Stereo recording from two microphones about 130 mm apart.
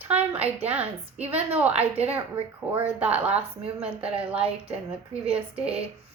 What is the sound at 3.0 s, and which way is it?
Speech, 10° right (ahead or behind).